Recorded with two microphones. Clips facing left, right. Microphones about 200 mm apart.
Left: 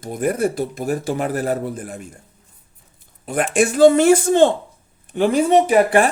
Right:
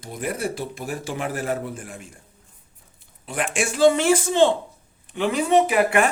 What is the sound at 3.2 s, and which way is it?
Speech, 45° left (ahead or behind).